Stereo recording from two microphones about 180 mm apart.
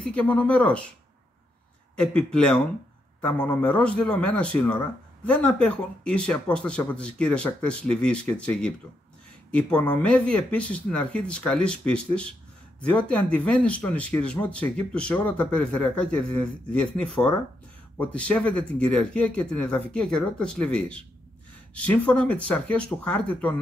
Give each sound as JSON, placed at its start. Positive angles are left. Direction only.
{"t": 0.0, "sound": "speech", "side_deg": 5}
{"t": 2.0, "sound": "speech", "side_deg": 5}